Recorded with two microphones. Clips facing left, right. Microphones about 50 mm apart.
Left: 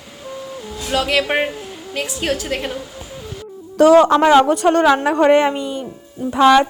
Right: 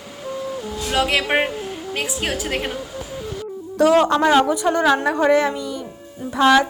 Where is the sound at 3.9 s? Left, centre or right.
Left.